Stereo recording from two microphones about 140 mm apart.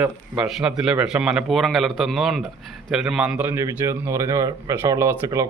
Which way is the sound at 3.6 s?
20° right (ahead or behind).